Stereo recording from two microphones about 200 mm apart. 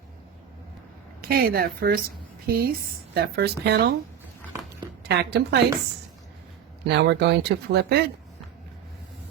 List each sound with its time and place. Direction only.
1.2 s a woman's voice: 50° right (ahead or behind)
5.0 s speech: 55° right (ahead or behind)
6.8 s speech: 60° right (ahead or behind)